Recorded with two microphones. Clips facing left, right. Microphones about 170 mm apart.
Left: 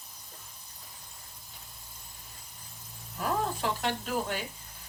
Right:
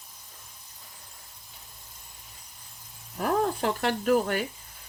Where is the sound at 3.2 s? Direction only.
55° right (ahead or behind).